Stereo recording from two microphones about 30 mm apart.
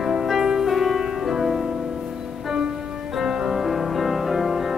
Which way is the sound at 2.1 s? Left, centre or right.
Right.